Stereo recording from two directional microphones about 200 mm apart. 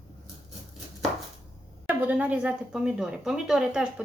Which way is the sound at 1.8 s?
5° right (ahead or behind).